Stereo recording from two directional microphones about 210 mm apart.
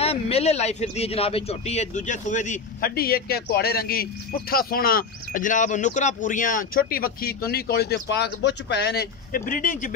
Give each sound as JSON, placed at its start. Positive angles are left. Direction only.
{"t": 0.0, "sound": "a man's voice", "side_deg": 30}